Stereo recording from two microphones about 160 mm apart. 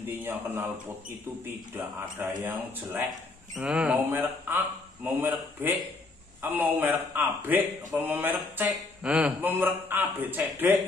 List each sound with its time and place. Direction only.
0.2 s speech: 15° right (ahead or behind)
1.7 s speech: 10° right (ahead or behind)